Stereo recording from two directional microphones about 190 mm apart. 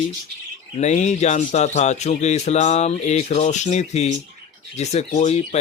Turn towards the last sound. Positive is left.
turn(degrees=35)  # may be behind; listen again after turning